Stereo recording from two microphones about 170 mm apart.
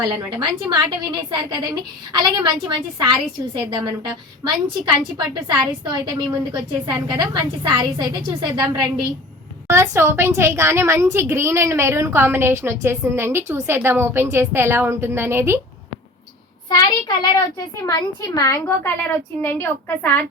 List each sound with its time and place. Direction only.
0.0 s a woman's voice: 20° right (ahead or behind)
5.1 s a woman's voice: 25° right (ahead or behind)
16.6 s a child's voice: 25° left (ahead or behind)